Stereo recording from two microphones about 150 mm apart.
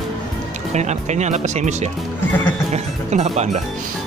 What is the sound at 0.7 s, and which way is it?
Speech, 50° right (ahead or behind).